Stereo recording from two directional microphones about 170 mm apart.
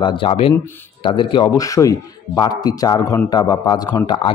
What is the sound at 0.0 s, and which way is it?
A man's voice, 30° left (ahead or behind).